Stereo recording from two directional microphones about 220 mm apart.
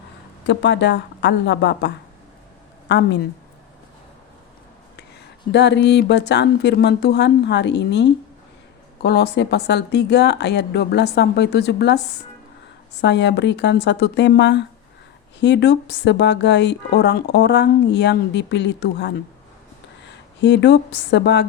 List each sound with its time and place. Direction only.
0.4 s a woman's voice: 55° left (ahead or behind)
2.9 s a woman's voice: 50° left (ahead or behind)
5.5 s a woman's voice: 50° left (ahead or behind)
13.0 s a woman's voice: 50° left (ahead or behind)
20.4 s a woman's voice: 50° left (ahead or behind)